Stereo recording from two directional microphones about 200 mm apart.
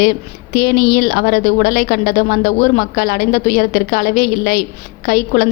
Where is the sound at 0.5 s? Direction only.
45° left (ahead or behind).